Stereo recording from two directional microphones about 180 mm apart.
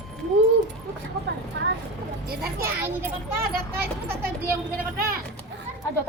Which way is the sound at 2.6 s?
10° right (ahead or behind).